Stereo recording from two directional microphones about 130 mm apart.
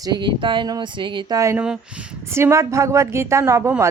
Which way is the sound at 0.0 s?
35° right (ahead or behind).